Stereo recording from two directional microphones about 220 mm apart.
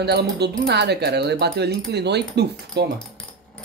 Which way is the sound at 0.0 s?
50° right (ahead or behind).